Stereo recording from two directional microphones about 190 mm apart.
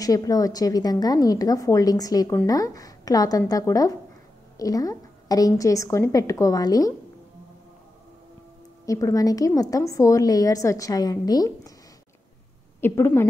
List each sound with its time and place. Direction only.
0.0 s a woman's voice: 20° left (ahead or behind)
8.8 s a woman's voice: 15° left (ahead or behind)
12.8 s a woman's voice: 10° left (ahead or behind)